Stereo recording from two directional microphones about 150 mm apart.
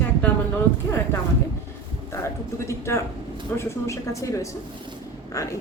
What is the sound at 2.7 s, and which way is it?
A woman's voice, 15° left (ahead or behind).